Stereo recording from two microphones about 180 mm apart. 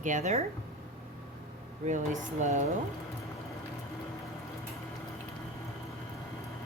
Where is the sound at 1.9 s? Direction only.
45° right (ahead or behind).